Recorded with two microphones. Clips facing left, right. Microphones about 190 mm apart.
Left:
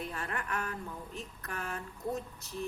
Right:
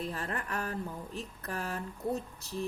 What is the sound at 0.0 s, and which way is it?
A woman's voice, 35° right (ahead or behind).